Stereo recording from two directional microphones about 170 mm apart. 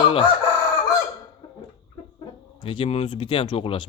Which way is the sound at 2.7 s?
30° left (ahead or behind).